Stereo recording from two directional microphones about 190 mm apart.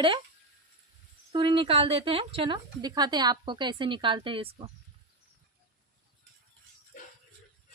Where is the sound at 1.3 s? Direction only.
30° right (ahead or behind).